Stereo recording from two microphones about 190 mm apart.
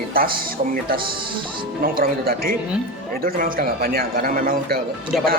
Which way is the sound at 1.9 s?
50° right (ahead or behind).